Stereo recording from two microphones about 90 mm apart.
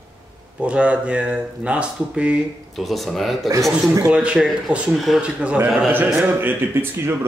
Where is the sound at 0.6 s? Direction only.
15° right (ahead or behind).